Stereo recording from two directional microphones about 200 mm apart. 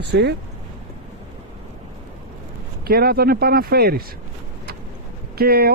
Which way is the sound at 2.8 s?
50° right (ahead or behind).